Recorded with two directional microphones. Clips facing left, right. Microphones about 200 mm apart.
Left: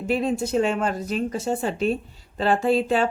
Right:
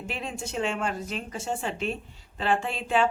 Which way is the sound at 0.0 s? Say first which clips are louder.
Left 12 dB; 40° left (ahead or behind).